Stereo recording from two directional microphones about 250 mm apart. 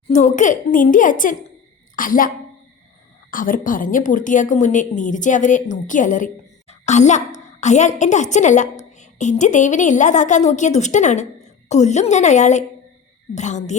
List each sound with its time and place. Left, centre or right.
0.1 s a woman's voice: left
3.3 s a woman's voice: left